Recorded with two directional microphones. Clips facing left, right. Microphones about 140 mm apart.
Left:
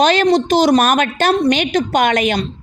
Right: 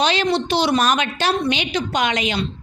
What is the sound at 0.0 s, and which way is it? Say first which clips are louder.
A woman's voice: left 6 dB; 45° left (ahead or behind).